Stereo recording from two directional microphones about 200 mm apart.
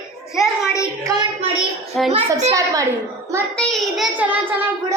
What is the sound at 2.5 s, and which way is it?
Speech, 15° right (ahead or behind).